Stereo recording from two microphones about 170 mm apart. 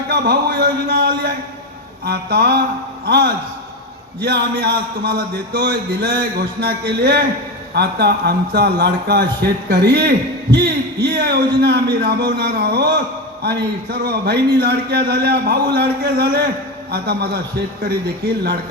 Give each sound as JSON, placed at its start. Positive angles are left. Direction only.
{"t": 0.1, "sound": "a man's voice", "side_deg": -70}